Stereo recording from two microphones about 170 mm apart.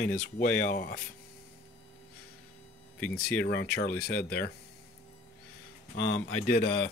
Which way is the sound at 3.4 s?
70° left (ahead or behind).